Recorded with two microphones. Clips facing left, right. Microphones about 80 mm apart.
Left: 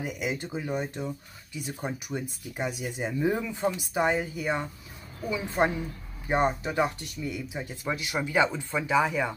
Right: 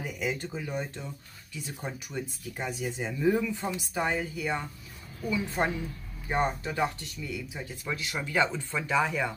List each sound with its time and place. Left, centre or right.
0.0 s speech: centre